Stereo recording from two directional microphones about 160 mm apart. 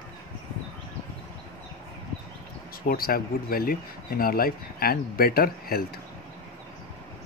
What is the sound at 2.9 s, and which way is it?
Speech, 65° left (ahead or behind).